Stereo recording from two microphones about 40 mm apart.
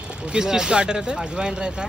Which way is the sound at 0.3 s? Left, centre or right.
Centre.